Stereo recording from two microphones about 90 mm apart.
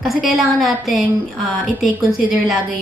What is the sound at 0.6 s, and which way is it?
A woman's voice, centre (ahead or behind).